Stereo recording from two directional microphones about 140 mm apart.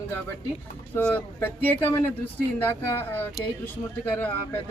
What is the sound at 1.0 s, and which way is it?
Speech, 15° left (ahead or behind).